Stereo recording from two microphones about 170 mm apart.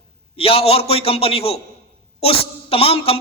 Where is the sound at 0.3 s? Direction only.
35° left (ahead or behind).